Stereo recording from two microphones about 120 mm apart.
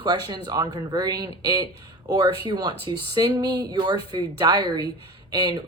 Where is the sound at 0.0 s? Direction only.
35° right (ahead or behind).